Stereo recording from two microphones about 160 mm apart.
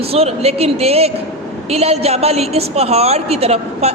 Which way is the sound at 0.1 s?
40° right (ahead or behind).